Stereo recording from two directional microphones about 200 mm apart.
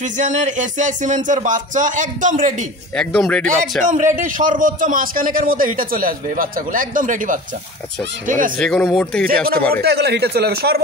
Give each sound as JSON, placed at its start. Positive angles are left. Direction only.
{"t": 0.2, "sound": "speech", "side_deg": -35}
{"t": 3.0, "sound": "speech", "side_deg": 5}
{"t": 3.8, "sound": "a man's voice", "side_deg": -40}
{"t": 8.5, "sound": "speech", "side_deg": 5}
{"t": 9.8, "sound": "a man's voice", "side_deg": -55}